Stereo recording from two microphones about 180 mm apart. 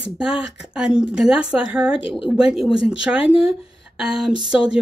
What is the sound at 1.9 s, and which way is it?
Speech, 30° left (ahead or behind).